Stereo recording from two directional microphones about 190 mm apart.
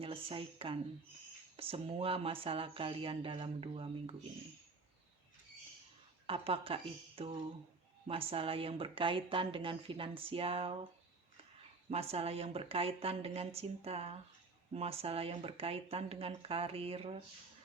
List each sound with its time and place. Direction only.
0.0 s speech: 30° right (ahead or behind)
6.2 s speech: 30° right (ahead or behind)
11.9 s speech: 30° right (ahead or behind)